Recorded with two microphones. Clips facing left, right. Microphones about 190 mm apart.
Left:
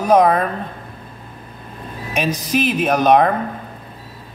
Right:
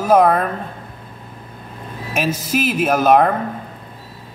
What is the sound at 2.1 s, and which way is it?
Speech, 5° right (ahead or behind).